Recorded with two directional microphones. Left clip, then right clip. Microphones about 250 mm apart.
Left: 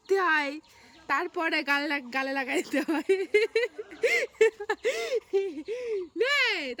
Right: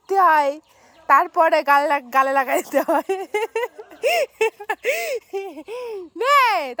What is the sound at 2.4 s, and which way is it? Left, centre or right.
Speech, right.